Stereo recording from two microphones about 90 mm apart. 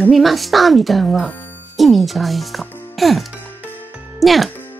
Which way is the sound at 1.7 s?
Centre (ahead or behind).